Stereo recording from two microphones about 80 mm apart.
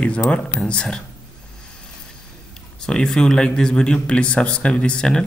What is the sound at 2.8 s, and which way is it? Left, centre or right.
Speech, centre.